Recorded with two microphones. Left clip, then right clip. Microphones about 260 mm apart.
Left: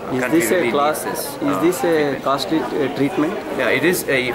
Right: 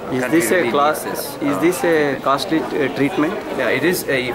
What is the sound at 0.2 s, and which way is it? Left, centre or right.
Speech, centre.